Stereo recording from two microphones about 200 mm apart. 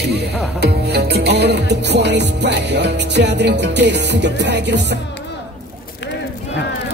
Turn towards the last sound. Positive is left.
turn(degrees=-60)  # may be behind; listen again after turning